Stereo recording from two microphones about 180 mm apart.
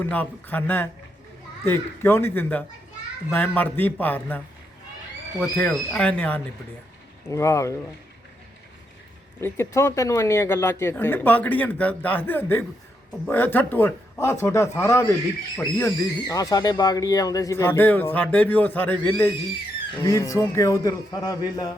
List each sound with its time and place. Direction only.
0.0 s speech: 10° left (ahead or behind)
9.4 s speech: 15° left (ahead or behind)